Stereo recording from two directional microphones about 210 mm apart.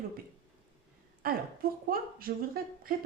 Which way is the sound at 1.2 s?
45° right (ahead or behind).